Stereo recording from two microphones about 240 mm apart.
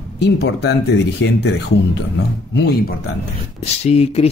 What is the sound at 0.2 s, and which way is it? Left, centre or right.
Speech, left.